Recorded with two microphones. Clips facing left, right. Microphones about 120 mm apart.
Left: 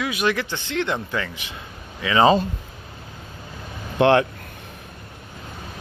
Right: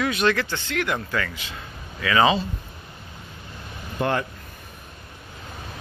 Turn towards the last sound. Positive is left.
turn(degrees=80)